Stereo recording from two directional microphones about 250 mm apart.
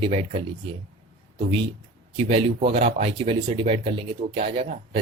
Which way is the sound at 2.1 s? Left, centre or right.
Right.